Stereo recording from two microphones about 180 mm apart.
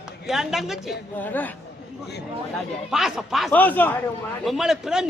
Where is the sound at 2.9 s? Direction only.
Centre (ahead or behind).